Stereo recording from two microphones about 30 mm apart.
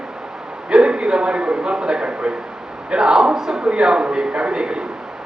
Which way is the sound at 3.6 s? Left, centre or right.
Right.